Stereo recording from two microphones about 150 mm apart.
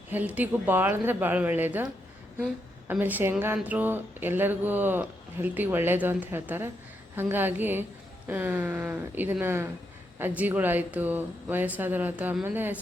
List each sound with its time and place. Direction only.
0.1 s speech: 10° right (ahead or behind)